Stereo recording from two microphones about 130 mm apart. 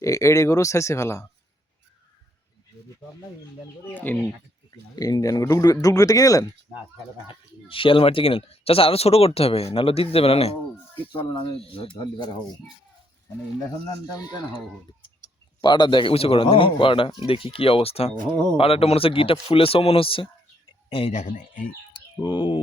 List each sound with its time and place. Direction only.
0.0 s speech: 25° left (ahead or behind)
3.8 s speech: 15° left (ahead or behind)
4.7 s speech: 30° left (ahead or behind)
7.3 s speech: 45° left (ahead or behind)
14.1 s speech: 30° left (ahead or behind)
15.6 s speech: 35° left (ahead or behind)
21.1 s speech: 70° left (ahead or behind)
21.9 s speech: 40° left (ahead or behind)